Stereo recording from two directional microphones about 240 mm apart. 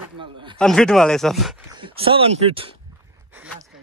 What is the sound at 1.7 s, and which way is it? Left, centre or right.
Speech, right.